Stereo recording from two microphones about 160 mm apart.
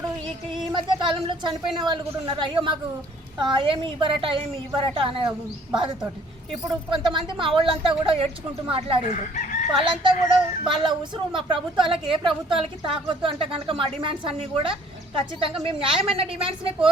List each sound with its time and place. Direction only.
0.7 s a woman's voice: 30° right (ahead or behind)
6.7 s speech: 30° right (ahead or behind)
9.0 s chicken: 50° left (ahead or behind)
9.7 s speech: 30° right (ahead or behind)